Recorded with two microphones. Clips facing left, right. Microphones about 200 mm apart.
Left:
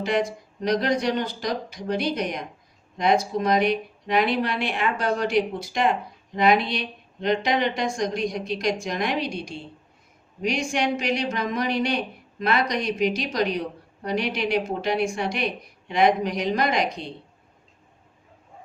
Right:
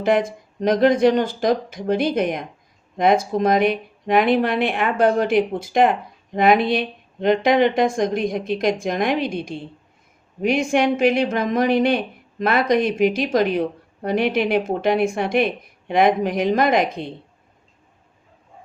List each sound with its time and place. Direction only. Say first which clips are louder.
0.0 s a woman's voice: right 5 dB; 50° right (ahead or behind)